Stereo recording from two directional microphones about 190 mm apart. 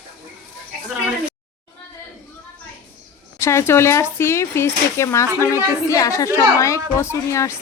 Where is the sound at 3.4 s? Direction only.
15° left (ahead or behind).